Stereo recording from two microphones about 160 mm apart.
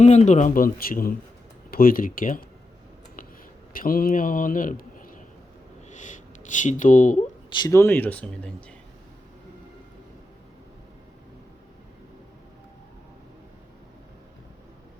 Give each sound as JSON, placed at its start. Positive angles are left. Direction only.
{"t": 0.0, "sound": "a man's voice", "side_deg": 45}
{"t": 3.7, "sound": "speech", "side_deg": 65}
{"t": 7.5, "sound": "speech", "side_deg": 20}